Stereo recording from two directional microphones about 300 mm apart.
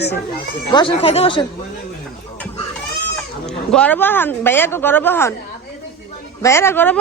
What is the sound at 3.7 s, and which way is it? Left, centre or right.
Speech, centre.